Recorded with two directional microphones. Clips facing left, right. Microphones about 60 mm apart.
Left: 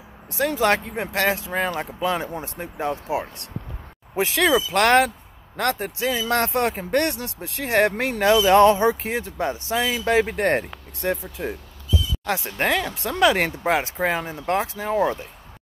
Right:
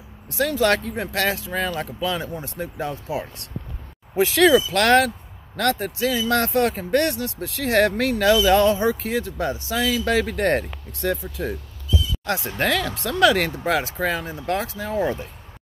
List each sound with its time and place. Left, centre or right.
0.3 s speech: left
4.6 s speech: left
12.5 s speech: left